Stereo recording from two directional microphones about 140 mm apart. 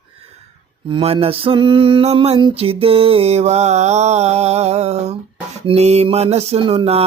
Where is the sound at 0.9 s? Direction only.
40° right (ahead or behind).